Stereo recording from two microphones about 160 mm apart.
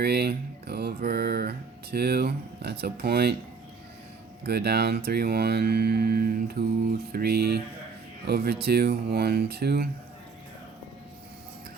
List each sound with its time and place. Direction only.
0.0 s speech: 85° right
4.4 s speech: 90° right; by 9.9 s 75° right (ahead or behind)